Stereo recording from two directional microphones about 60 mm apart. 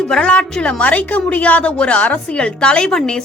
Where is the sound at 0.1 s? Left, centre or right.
Centre.